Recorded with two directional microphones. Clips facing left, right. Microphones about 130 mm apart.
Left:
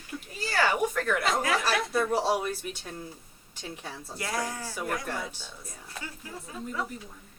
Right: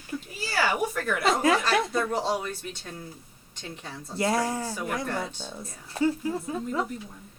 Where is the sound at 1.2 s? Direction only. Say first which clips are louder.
Right 9 dB; 25° right (ahead or behind).